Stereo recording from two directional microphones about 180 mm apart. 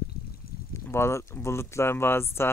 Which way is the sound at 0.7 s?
15° left (ahead or behind).